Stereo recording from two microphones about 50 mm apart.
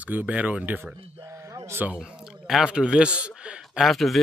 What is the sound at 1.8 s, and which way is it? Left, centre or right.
Speech, right.